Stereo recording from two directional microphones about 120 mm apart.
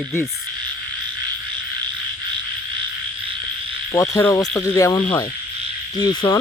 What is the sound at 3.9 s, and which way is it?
Speech, 25° left (ahead or behind).